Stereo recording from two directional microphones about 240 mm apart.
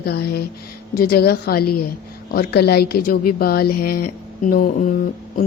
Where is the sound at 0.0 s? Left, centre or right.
Left.